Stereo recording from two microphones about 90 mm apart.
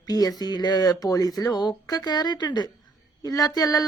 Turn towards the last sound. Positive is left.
turn(degrees=40)  # may be behind; listen again after turning